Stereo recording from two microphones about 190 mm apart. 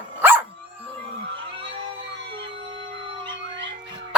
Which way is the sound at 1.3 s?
30° right (ahead or behind).